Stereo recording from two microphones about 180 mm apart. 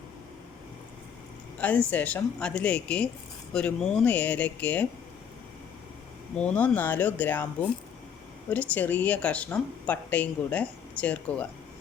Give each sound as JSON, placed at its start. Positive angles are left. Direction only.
{"t": 1.5, "sound": "speech", "side_deg": 10}
{"t": 6.3, "sound": "speech", "side_deg": 5}
{"t": 8.4, "sound": "speech", "side_deg": 10}